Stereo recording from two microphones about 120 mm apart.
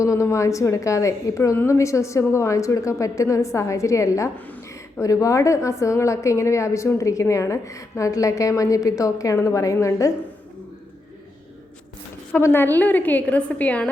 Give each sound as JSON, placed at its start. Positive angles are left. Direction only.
{"t": 0.0, "sound": "a woman's voice", "side_deg": 25}
{"t": 4.4, "sound": "speech", "side_deg": 15}
{"t": 4.7, "sound": "a woman's voice", "side_deg": 25}
{"t": 12.3, "sound": "a woman's voice", "side_deg": 20}